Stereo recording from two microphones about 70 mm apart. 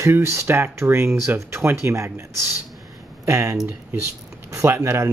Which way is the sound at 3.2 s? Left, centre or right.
Right.